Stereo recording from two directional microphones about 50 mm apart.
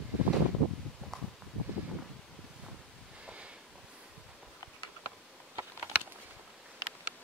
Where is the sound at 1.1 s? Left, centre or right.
Centre.